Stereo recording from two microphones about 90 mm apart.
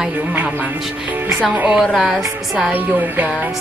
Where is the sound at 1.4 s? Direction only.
15° right (ahead or behind).